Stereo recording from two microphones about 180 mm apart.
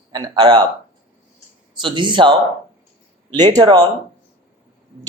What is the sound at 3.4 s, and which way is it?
Speech, 25° right (ahead or behind).